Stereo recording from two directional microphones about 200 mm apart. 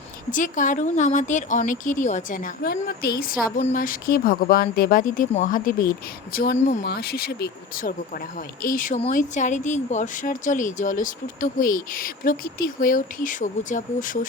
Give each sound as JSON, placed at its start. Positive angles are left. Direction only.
{"t": 0.3, "sound": "speech", "side_deg": 40}
{"t": 3.6, "sound": "speech", "side_deg": 40}
{"t": 6.8, "sound": "speech", "side_deg": 50}